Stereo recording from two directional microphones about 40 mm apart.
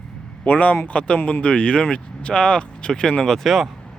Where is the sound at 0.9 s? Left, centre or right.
Left.